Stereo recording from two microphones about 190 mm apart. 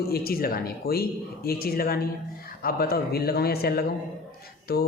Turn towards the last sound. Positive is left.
turn(degrees=55)  # may be behind; listen again after turning